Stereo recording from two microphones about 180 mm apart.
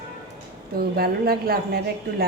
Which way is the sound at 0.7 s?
55° right (ahead or behind).